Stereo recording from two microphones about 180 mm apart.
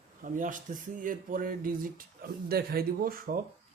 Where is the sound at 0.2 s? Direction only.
45° right (ahead or behind).